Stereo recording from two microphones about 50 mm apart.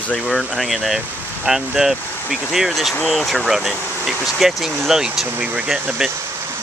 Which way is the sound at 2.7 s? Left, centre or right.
Centre.